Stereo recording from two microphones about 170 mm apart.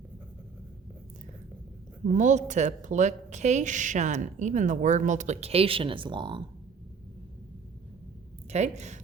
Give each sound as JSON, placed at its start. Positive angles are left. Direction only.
{"t": 2.1, "sound": "a woman's voice", "side_deg": -45}
{"t": 8.4, "sound": "a woman's voice", "side_deg": -40}